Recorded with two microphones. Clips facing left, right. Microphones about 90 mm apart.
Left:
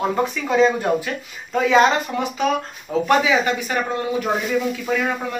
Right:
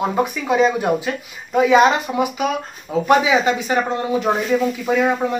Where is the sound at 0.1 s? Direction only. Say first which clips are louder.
Right 1 dB; 15° right (ahead or behind).